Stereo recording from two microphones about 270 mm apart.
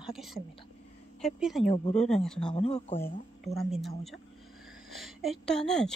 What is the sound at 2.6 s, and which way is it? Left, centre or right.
Speech, left.